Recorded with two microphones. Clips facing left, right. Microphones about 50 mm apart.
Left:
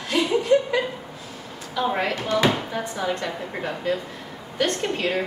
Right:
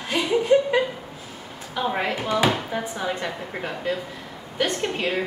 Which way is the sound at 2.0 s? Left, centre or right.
Centre.